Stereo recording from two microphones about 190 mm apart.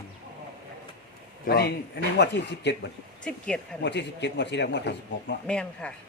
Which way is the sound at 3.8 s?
65° left (ahead or behind).